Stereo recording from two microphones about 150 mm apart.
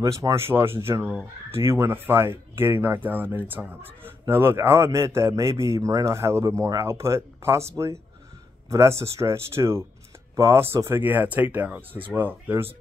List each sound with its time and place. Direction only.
0.0 s speech: 20° right (ahead or behind)